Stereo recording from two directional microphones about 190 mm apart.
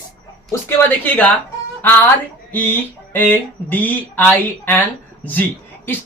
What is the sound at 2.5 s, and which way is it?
Speech, 10° left (ahead or behind).